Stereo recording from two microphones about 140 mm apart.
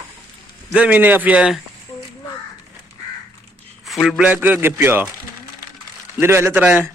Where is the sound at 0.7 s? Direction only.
10° right (ahead or behind).